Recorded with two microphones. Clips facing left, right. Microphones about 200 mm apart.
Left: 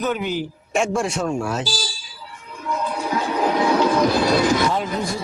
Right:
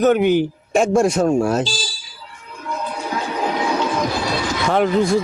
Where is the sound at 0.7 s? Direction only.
40° right (ahead or behind).